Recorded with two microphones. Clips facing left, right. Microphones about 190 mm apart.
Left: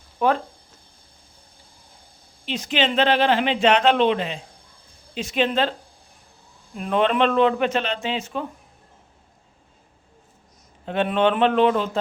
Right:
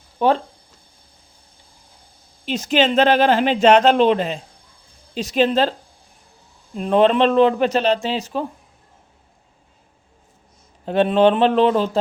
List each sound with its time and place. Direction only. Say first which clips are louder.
0.2 s speech: right 3 dB; 30° right (ahead or behind)
2.5 s a man's voice: right 5 dB; 45° right (ahead or behind)
6.7 s a man's voice: right 5 dB; 30° right (ahead or behind)
10.8 s a man's voice: right 5 dB; 35° right (ahead or behind)